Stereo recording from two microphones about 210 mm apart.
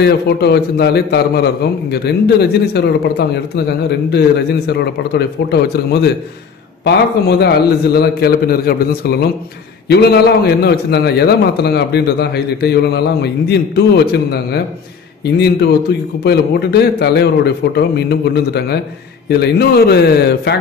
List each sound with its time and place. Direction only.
0.0 s a man's voice: 50° left (ahead or behind)
15.9 s a man's voice: 50° left (ahead or behind)